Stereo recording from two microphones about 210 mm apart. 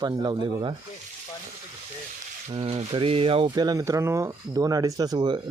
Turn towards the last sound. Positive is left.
turn(degrees=-20)  # may be behind; listen again after turning